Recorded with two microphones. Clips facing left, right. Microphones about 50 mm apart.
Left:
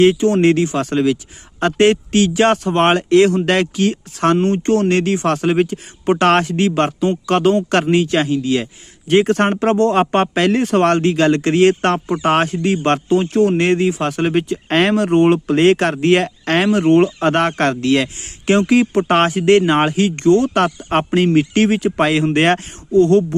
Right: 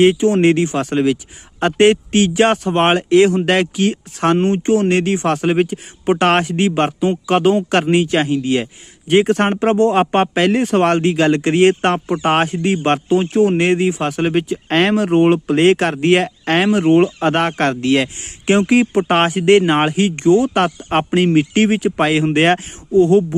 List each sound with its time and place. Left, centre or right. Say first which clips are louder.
0.4 s speech: even; right
8.3 s speech: even; right
9.0 s speech: even; centre